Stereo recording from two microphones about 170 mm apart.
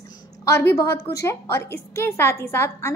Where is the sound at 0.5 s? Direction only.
15° left (ahead or behind).